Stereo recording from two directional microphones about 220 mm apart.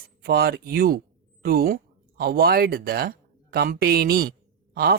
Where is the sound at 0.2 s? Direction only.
45° right (ahead or behind).